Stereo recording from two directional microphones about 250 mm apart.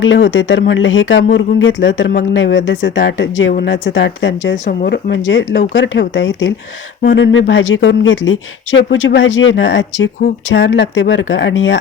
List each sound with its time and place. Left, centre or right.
0.0 s speech: left
4.5 s speech: left